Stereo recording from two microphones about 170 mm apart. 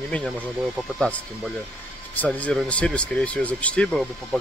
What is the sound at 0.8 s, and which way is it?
Speech, centre (ahead or behind).